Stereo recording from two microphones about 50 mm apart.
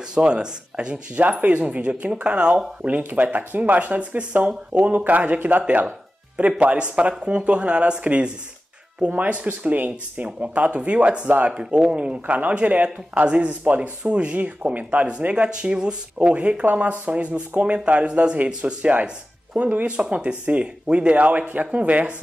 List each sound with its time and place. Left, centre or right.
0.1 s a man's voice: centre
1.4 s a man's voice: right
2.8 s a man's voice: right
11.5 s a man's voice: centre